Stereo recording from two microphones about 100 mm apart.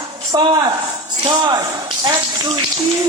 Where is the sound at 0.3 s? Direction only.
50° right (ahead or behind).